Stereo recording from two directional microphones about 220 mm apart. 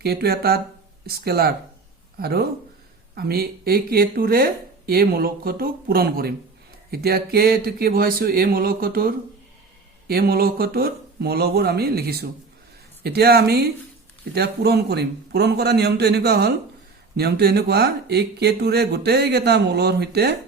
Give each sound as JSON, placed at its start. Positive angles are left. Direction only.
{"t": 0.0, "sound": "speech", "side_deg": -45}